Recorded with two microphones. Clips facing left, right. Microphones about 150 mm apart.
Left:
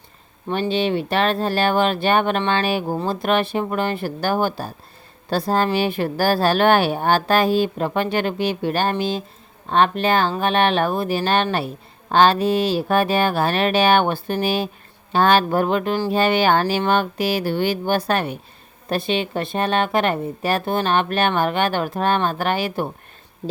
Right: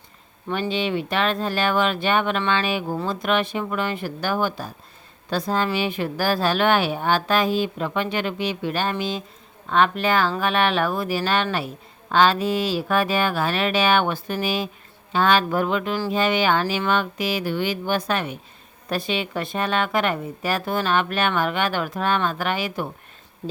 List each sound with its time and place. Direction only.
0.5 s speech: 30° left (ahead or behind)